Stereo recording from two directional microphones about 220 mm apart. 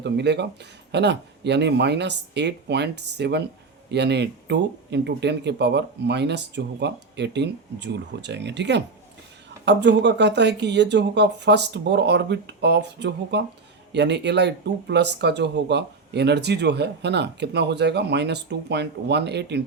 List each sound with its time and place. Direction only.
0.0 s speech: 50° right (ahead or behind)